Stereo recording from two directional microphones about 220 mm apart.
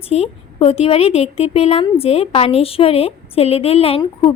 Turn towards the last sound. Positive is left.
turn(degrees=25)  # may be behind; listen again after turning